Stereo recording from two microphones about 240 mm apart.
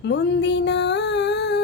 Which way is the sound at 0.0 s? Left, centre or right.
Left.